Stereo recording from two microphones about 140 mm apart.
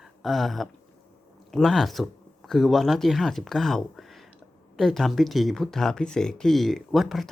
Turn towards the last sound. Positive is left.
turn(degrees=0)  # may be behind; listen again after turning